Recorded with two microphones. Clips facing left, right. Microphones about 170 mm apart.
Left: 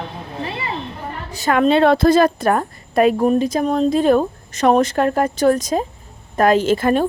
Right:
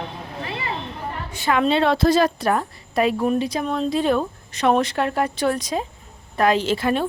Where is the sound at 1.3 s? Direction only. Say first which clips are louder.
Left 5 dB; 45° left (ahead or behind).